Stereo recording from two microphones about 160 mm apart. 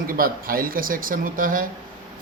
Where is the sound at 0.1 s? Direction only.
65° right (ahead or behind).